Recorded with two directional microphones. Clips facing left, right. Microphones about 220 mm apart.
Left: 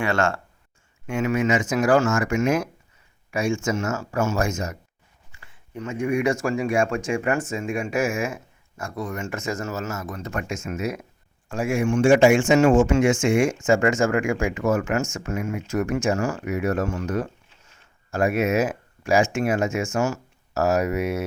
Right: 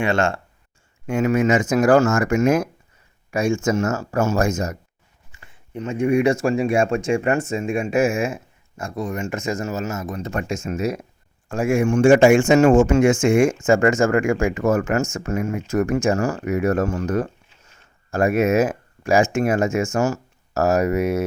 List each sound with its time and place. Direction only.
0.0 s speech: 20° right (ahead or behind)
1.1 s speech: 45° right (ahead or behind)
5.3 s speech: 20° right (ahead or behind)
11.4 s speech: 45° right (ahead or behind)